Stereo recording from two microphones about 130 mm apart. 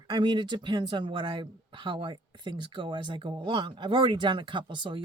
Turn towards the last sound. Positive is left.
turn(degrees=-40)  # may be behind; listen again after turning